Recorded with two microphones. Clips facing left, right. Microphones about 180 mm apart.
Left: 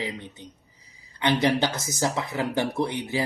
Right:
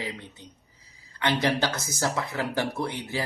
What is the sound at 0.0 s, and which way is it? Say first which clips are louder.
Speech: left 3 dB; 20° left (ahead or behind).